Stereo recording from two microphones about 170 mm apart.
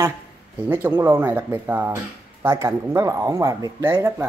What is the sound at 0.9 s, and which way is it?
Speech, 15° right (ahead or behind).